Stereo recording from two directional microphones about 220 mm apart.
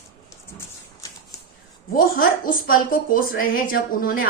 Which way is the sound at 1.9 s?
40° left (ahead or behind).